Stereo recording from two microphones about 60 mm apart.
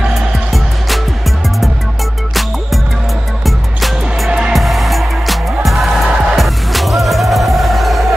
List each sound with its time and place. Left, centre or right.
0.5 s music: centre
3.4 s music: centre
4.3 s music: centre
4.6 s music: centre